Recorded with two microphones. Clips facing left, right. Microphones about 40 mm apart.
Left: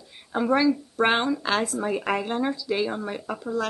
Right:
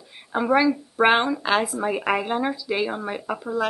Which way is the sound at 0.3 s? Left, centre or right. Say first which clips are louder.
Right 2 dB; centre.